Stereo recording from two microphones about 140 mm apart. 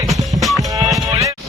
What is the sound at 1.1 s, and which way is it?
Music, 20° right (ahead or behind).